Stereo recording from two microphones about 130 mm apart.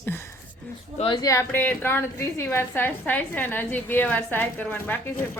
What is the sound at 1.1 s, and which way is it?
A woman's voice, 25° left (ahead or behind).